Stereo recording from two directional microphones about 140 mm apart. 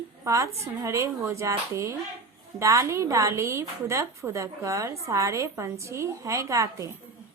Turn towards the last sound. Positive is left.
turn(degrees=-20)  # may be behind; listen again after turning